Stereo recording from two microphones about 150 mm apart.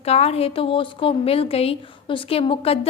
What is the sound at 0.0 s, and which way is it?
A woman's voice, 45° left (ahead or behind).